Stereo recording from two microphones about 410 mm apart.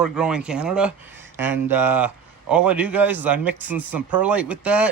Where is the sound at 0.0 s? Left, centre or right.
Centre.